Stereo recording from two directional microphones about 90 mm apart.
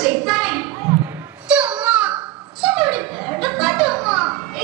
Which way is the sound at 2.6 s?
5° right (ahead or behind).